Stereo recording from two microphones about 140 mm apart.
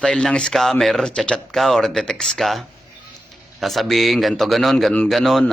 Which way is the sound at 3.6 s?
Centre (ahead or behind).